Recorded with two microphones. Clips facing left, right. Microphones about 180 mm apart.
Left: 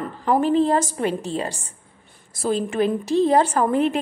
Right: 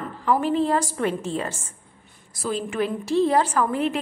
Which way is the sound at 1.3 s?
35° left (ahead or behind).